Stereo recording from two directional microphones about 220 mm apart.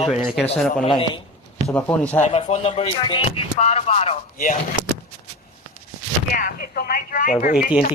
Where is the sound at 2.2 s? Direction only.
30° left (ahead or behind).